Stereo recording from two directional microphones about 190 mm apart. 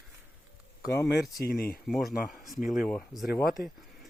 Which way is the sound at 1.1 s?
50° left (ahead or behind).